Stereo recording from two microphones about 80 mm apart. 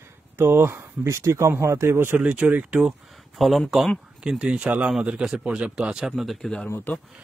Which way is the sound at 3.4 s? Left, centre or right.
Centre.